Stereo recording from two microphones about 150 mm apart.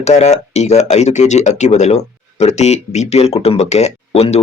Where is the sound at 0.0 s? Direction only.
45° left (ahead or behind).